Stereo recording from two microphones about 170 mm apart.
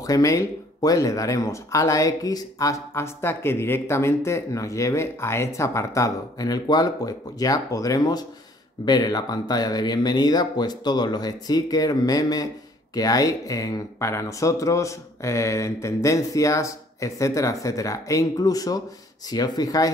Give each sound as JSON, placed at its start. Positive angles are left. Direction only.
{"t": 0.0, "sound": "speech", "side_deg": 20}